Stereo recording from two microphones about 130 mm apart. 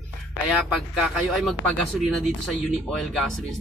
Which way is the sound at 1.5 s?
Centre (ahead or behind).